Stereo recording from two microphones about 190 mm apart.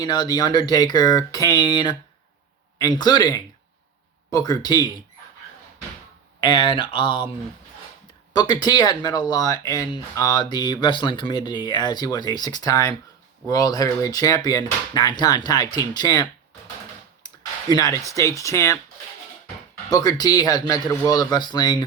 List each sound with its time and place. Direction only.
0.0 s speech: 20° left (ahead or behind)
6.4 s speech: 25° left (ahead or behind)
8.3 s speech: 20° left (ahead or behind)
17.2 s a sound: 20° left (ahead or behind)
18.1 s speech: 15° left (ahead or behind)
19.9 s speech: 20° left (ahead or behind)